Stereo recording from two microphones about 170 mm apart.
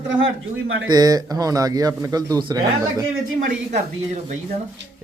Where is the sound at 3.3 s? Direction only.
50° right (ahead or behind).